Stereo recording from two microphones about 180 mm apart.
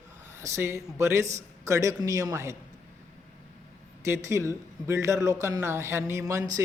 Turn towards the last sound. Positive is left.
turn(degrees=-20)  # may be behind; listen again after turning